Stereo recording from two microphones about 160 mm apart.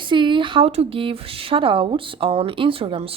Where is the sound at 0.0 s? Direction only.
30° right (ahead or behind).